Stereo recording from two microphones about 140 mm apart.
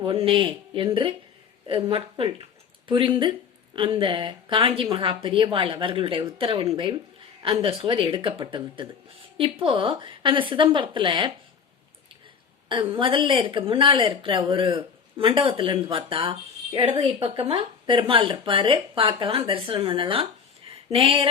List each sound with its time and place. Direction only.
0.0 s speech: 40° right (ahead or behind)
12.6 s speech: 35° right (ahead or behind)
20.7 s a sound: 40° right (ahead or behind)